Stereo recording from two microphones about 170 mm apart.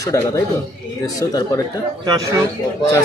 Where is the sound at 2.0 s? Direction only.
20° right (ahead or behind).